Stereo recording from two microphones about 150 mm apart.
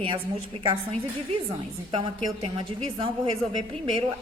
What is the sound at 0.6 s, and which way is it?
A woman's voice, 35° right (ahead or behind).